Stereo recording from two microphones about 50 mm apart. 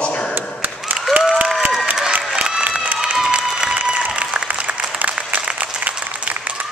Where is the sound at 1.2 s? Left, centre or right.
Right.